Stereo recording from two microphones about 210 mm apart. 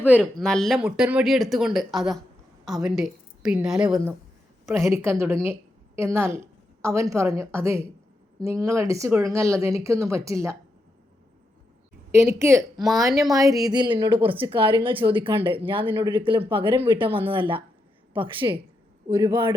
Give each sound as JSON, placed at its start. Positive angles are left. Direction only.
{"t": 0.2, "sound": "a woman's voice", "side_deg": 0}
{"t": 12.1, "sound": "a woman's voice", "side_deg": -10}